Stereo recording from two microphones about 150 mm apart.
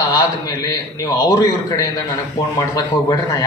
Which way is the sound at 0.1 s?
25° left (ahead or behind).